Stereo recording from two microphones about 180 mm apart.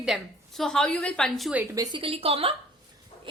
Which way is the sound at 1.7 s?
25° right (ahead or behind).